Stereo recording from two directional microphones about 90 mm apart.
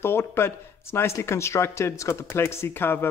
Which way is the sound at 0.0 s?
25° left (ahead or behind).